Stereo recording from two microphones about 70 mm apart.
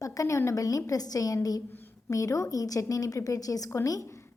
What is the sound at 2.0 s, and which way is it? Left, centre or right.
A woman's voice, left.